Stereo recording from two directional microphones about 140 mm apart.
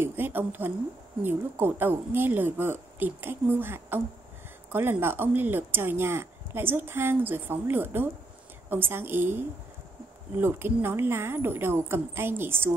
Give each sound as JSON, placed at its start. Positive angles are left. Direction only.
{"t": 0.0, "sound": "a woman's voice", "side_deg": -15}